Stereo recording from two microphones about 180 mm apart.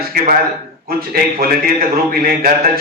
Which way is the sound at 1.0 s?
55° right (ahead or behind).